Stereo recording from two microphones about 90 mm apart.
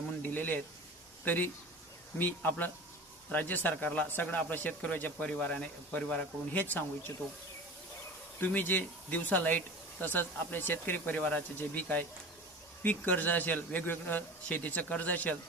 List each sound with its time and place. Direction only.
0.2 s a sound: 20° left (ahead or behind)
1.2 s speech: 20° left (ahead or behind)
8.4 s speech: 20° left (ahead or behind)